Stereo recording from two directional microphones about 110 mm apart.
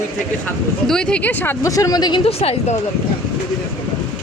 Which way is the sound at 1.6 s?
30° left (ahead or behind).